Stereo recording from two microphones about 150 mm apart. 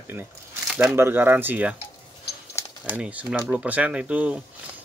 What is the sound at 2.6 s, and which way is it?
Bird, 20° left (ahead or behind).